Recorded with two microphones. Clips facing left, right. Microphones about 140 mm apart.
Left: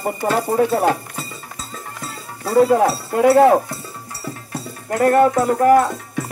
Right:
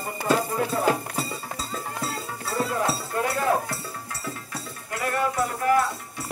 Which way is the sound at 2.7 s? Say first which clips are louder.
Left 9 dB; 75° left (ahead or behind).